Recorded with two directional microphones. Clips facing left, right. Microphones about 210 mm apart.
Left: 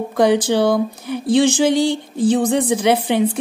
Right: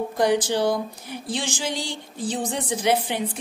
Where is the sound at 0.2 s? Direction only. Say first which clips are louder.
Left 6 dB; 65° left (ahead or behind).